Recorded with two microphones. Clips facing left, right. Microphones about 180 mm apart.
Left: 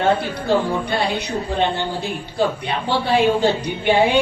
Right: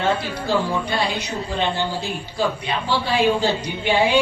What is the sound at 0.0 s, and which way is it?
A woman's voice, 60° left (ahead or behind).